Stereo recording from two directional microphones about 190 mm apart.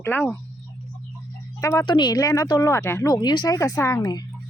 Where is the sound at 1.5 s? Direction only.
15° left (ahead or behind).